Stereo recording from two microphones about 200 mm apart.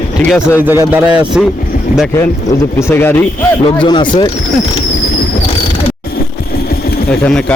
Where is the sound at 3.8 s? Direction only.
20° left (ahead or behind).